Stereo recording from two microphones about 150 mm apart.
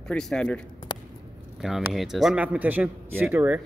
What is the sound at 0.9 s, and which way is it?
Squish, 30° left (ahead or behind).